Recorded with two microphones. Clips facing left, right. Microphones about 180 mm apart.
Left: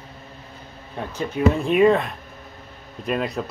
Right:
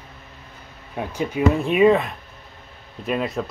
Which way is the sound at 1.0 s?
10° right (ahead or behind).